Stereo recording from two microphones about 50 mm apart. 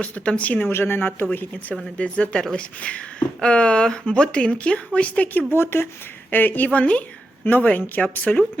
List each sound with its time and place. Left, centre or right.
0.0 s a man's voice: left
0.7 s a man's voice: left
2.0 s speech: left
5.5 s speech: left
6.3 s a man's voice: left
6.7 s a man's voice: left